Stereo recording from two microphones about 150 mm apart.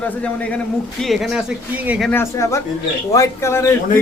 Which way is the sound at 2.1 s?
20° left (ahead or behind).